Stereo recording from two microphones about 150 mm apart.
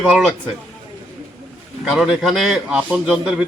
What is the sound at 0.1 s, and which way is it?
Speech, 5° right (ahead or behind).